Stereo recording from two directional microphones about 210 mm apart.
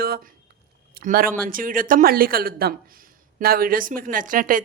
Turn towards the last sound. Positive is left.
turn(degrees=-40)  # may be behind; listen again after turning